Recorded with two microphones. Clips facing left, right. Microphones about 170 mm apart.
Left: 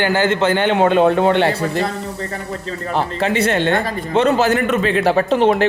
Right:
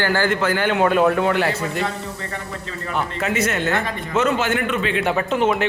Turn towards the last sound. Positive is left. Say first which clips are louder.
# left 5 dB
turn(degrees=35)  # may be behind; listen again after turning